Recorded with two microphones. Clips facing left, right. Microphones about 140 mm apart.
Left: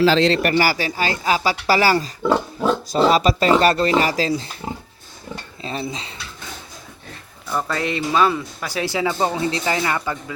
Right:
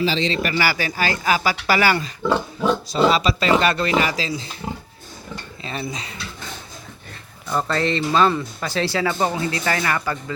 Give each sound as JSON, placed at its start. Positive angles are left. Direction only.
{"t": 0.0, "sound": "a man's voice", "side_deg": 90}
{"t": 0.6, "sound": "speech", "side_deg": 35}
{"t": 2.2, "sound": "speech", "side_deg": 10}
{"t": 2.9, "sound": "speech", "side_deg": 45}
{"t": 5.6, "sound": "speech", "side_deg": 30}
{"t": 7.5, "sound": "speech", "side_deg": 10}